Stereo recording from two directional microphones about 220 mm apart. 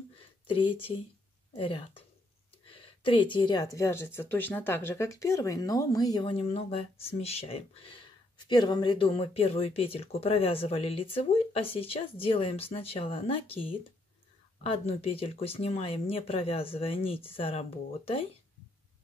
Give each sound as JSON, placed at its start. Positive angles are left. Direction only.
{"t": 0.5, "sound": "a woman's voice", "side_deg": 25}
{"t": 14.6, "sound": "speech", "side_deg": 25}